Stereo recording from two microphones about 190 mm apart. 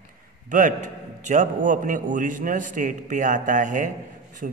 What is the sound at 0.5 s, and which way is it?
A man's voice, 45° right (ahead or behind).